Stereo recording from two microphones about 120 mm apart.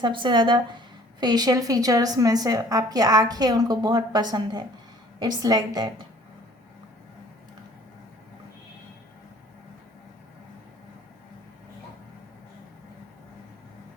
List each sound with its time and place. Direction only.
0.0 s a woman's voice: 40° right (ahead or behind)